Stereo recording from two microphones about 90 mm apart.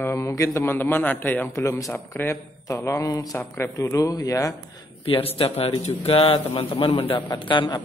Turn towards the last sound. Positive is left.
turn(degrees=60)  # may be behind; listen again after turning